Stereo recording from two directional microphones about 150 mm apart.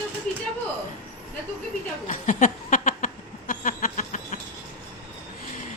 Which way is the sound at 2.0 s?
60° left (ahead or behind).